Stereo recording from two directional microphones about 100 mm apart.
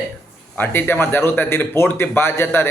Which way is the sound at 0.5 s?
20° left (ahead or behind).